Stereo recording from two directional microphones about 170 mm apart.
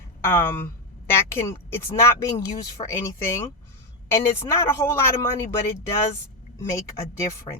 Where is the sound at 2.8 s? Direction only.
30° left (ahead or behind).